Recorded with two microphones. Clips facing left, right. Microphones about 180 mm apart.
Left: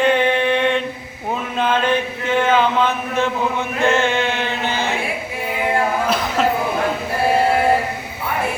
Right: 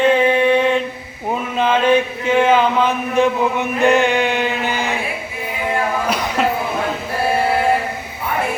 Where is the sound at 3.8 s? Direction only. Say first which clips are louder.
Right 3 dB; 15° right (ahead or behind).